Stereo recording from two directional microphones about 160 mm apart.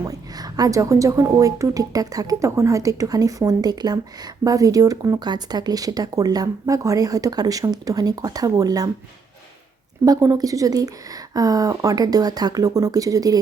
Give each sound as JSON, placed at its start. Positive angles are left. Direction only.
{"t": 0.0, "sound": "speech", "side_deg": -25}
{"t": 10.1, "sound": "speech", "side_deg": -20}